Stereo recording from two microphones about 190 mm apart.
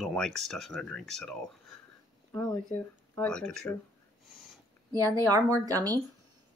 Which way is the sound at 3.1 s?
5° left (ahead or behind).